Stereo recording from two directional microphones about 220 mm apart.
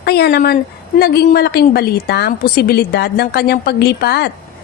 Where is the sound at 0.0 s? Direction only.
45° left (ahead or behind).